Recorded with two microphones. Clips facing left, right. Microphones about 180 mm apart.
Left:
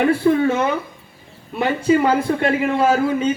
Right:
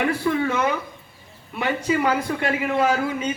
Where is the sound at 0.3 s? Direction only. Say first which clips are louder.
Left 5 dB; 30° left (ahead or behind).